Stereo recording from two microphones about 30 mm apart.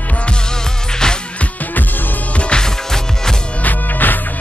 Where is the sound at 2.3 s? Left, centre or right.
Left.